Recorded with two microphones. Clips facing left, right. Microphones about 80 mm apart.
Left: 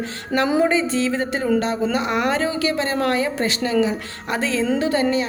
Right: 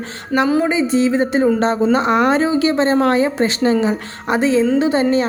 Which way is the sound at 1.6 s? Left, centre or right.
Right.